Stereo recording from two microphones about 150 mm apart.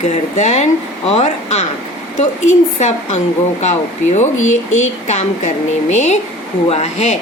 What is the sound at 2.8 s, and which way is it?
A woman's voice, 50° left (ahead or behind).